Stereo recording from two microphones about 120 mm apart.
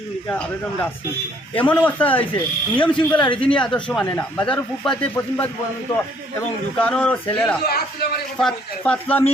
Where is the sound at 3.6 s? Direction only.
10° left (ahead or behind).